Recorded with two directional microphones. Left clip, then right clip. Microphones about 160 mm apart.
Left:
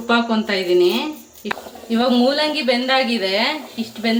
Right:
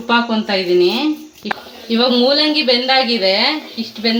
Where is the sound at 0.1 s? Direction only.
40° right (ahead or behind).